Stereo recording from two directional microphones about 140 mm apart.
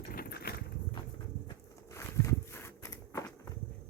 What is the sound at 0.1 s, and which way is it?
Vehicle, 90° left.